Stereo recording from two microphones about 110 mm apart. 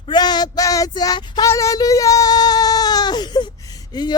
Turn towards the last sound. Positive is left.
turn(degrees=40)  # may be behind; listen again after turning